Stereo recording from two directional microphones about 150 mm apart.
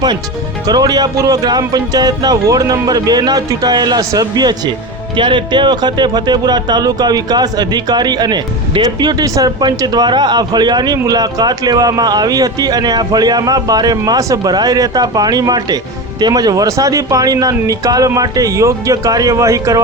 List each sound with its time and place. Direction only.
0.7 s speech: 25° right (ahead or behind)